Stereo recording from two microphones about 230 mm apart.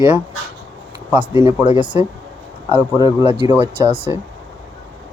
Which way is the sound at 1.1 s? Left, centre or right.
Centre.